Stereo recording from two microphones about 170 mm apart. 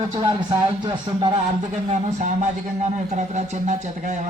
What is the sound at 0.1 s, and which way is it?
Speech, 30° right (ahead or behind).